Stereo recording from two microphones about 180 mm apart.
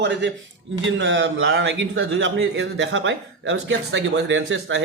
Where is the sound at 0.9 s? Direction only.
90° right.